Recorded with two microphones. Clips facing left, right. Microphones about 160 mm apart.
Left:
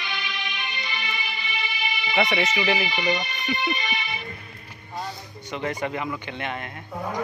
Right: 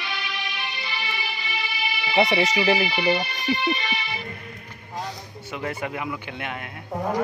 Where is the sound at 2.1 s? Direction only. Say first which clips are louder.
Right 3 dB; 30° right (ahead or behind).